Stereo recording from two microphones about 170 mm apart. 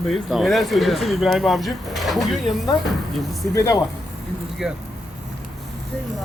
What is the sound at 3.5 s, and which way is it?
Speech, 20° left (ahead or behind).